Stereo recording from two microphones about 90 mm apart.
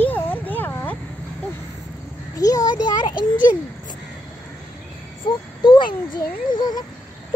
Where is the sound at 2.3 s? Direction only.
40° left (ahead or behind).